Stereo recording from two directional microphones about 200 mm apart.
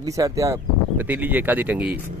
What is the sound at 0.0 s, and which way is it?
Speech, 15° right (ahead or behind).